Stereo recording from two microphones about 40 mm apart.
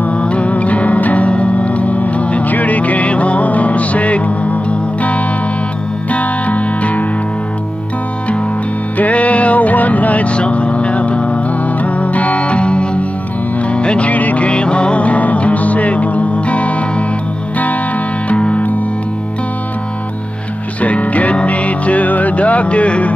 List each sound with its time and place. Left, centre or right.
0.1 s music: left
8.9 s music: left
18.3 s music: left
20.8 s music: left